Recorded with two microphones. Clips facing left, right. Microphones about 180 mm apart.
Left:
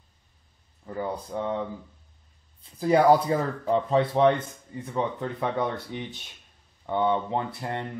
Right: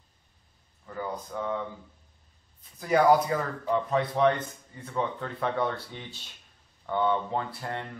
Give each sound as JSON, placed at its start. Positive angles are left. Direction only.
{"t": 0.8, "sound": "speech", "side_deg": 30}
{"t": 2.8, "sound": "speech", "side_deg": 30}
{"t": 4.8, "sound": "speech", "side_deg": 20}